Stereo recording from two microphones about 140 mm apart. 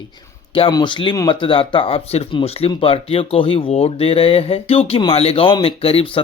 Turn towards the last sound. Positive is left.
turn(degrees=40)  # may be behind; listen again after turning